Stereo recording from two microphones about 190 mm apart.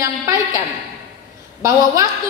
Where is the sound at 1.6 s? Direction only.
15° right (ahead or behind).